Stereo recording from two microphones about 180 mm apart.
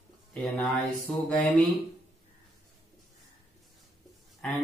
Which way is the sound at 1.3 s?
5° left (ahead or behind).